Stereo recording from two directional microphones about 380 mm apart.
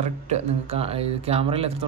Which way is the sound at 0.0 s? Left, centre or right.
Centre.